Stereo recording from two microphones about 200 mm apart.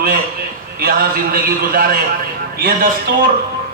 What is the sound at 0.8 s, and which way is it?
Speech, 45° right (ahead or behind).